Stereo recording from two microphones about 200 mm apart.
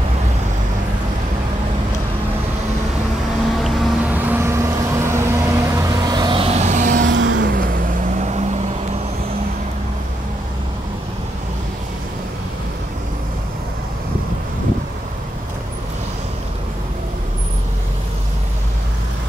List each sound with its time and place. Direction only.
3.6 s vehicle: centre (ahead or behind); by 7.1 s 40° right (ahead or behind)
7.1 s vehicle: 70° right (ahead or behind)
7.3 s vehicle: 45° right (ahead or behind)